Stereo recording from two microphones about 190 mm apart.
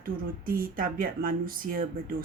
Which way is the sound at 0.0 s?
50° right (ahead or behind).